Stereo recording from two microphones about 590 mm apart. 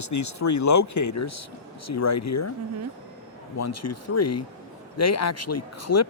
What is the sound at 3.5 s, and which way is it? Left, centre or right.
Speech, left.